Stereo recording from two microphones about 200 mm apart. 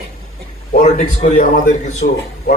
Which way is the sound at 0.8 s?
35° left (ahead or behind).